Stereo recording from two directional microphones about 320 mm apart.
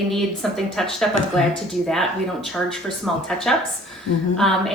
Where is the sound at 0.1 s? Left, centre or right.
Centre.